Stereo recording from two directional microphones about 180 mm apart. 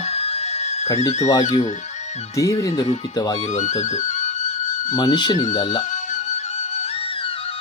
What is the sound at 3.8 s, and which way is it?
Music, 40° left (ahead or behind).